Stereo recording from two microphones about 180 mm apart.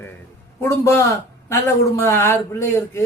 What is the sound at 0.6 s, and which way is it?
A man's voice, 15° left (ahead or behind).